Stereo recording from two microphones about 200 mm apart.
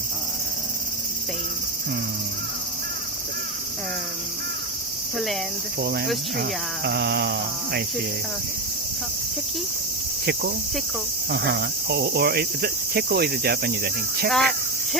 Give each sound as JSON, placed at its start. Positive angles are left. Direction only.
{"t": 5.1, "sound": "speech", "side_deg": 0}
{"t": 5.8, "sound": "cricket", "side_deg": -55}
{"t": 11.3, "sound": "cricket", "side_deg": -55}
{"t": 14.3, "sound": "speech", "side_deg": 0}